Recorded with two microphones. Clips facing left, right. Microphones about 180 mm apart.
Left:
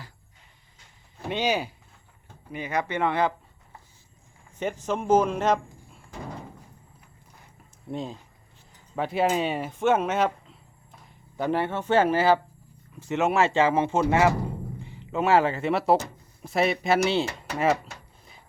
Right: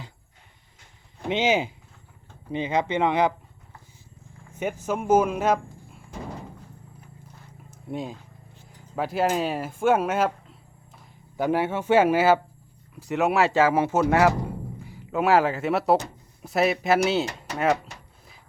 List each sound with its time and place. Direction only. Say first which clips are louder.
1.3 s speech: right 3 dB; 20° right (ahead or behind)
4.9 s speech: right 1 dB; 5° right (ahead or behind)
7.9 s speech: right 1 dB; 5° right (ahead or behind)